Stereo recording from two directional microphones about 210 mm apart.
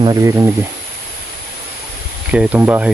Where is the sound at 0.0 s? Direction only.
15° right (ahead or behind).